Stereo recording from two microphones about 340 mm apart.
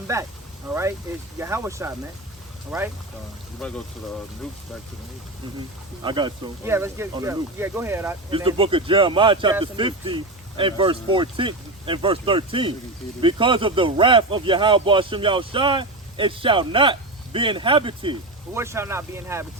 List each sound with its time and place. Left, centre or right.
0.1 s speech: centre
6.0 s speech: centre